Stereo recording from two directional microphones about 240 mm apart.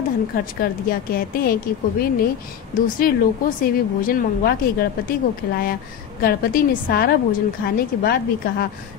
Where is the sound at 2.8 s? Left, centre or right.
Left.